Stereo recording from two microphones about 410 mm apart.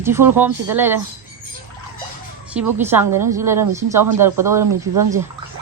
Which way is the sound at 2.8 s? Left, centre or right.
Centre.